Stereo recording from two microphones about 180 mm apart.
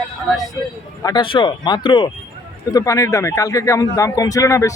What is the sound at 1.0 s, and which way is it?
A man's voice, 25° left (ahead or behind).